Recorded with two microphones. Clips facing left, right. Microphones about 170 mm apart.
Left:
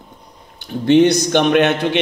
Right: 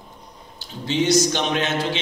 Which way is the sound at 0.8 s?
60° left (ahead or behind).